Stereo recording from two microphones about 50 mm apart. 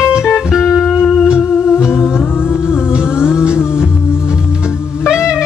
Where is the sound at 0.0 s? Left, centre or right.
Centre.